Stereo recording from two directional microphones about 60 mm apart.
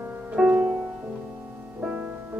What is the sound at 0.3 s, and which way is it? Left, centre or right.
Music, centre.